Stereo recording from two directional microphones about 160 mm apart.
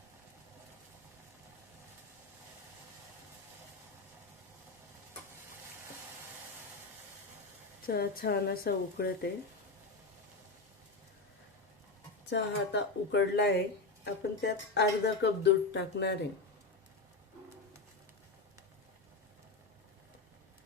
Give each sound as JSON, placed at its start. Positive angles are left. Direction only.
{"t": 7.9, "sound": "speech", "side_deg": 70}
{"t": 12.3, "sound": "speech", "side_deg": 90}